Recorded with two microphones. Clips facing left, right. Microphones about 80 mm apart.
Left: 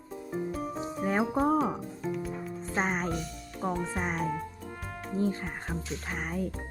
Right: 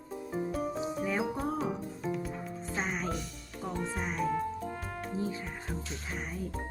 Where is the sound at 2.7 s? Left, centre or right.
Left.